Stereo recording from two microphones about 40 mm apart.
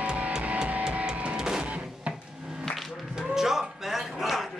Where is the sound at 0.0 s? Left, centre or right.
Right.